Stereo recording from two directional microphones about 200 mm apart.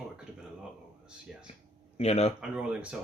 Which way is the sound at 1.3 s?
5° right (ahead or behind).